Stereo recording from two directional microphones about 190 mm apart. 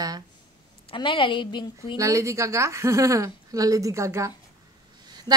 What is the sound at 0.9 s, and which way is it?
A woman's voice, 25° left (ahead or behind).